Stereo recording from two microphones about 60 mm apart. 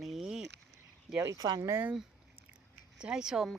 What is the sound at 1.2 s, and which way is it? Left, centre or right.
Speech, right.